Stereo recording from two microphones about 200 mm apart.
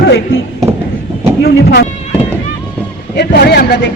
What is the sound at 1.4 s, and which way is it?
Speech, 55° left (ahead or behind).